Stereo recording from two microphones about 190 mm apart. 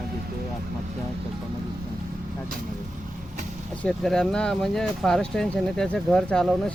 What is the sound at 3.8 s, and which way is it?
Speech, 5° left (ahead or behind).